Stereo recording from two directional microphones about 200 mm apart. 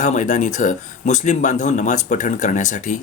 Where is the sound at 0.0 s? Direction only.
40° left (ahead or behind).